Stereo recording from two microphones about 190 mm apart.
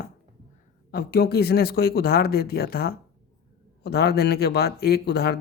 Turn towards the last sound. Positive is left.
turn(degrees=55)  # may be behind; listen again after turning